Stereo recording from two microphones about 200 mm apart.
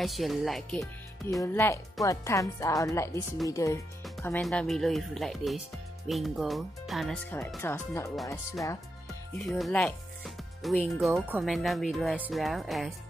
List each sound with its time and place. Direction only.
0.0 s speech: centre (ahead or behind)
1.4 s speech: 15° left (ahead or behind)
4.2 s speech: 5° left (ahead or behind)
7.2 s speech: 10° left (ahead or behind)
9.5 s speech: centre (ahead or behind)